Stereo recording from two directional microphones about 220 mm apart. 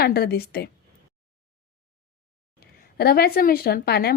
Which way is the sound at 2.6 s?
45° left (ahead or behind).